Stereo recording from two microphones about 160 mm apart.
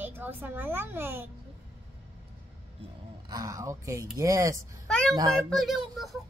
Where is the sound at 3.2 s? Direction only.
25° right (ahead or behind).